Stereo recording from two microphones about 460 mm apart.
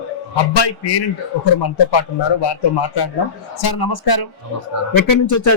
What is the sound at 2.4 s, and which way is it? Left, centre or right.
A man's voice, left.